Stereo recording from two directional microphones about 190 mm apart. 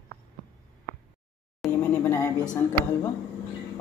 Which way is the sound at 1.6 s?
10° left (ahead or behind).